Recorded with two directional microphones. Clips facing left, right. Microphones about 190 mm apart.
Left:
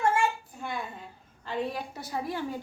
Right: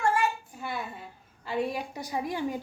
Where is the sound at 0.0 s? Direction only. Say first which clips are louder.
Left 1 dB; 25° left (ahead or behind).